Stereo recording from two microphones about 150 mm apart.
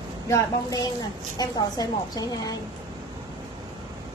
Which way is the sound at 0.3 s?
25° left (ahead or behind).